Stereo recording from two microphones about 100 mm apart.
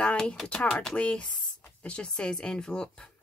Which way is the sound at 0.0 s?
10° left (ahead or behind).